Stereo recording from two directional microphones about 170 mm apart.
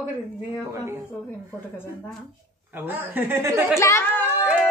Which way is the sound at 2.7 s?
10° right (ahead or behind).